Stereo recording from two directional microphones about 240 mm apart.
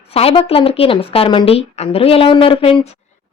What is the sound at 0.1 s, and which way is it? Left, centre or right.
Speech, left.